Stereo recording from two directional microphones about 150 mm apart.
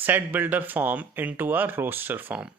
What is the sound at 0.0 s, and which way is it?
Speech, 10° right (ahead or behind).